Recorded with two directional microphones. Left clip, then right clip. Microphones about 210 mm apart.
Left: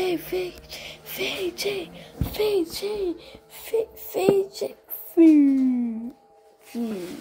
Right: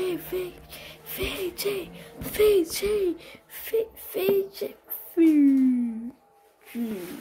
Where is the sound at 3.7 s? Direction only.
5° right (ahead or behind).